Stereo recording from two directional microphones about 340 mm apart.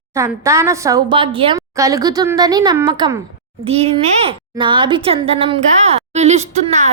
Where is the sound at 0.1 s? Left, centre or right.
Centre.